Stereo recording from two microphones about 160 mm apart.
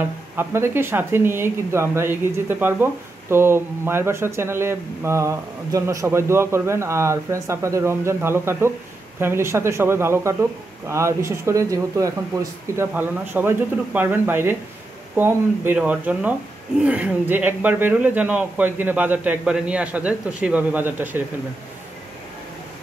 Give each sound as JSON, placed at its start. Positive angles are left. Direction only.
{"t": 0.4, "sound": "speech", "side_deg": -15}